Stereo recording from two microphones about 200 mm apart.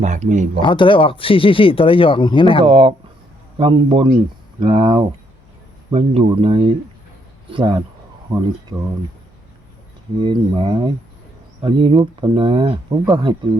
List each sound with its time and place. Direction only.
0.0 s speech: 35° right (ahead or behind)
0.6 s speech: 25° left (ahead or behind)
2.6 s speech: 30° right (ahead or behind)
10.2 s speech: 25° right (ahead or behind)